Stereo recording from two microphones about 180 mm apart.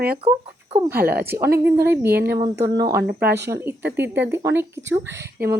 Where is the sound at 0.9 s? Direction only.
60° right (ahead or behind).